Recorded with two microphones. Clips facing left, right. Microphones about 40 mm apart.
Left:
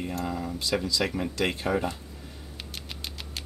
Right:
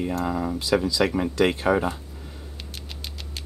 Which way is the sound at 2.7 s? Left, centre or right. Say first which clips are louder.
Left 1 dB; centre.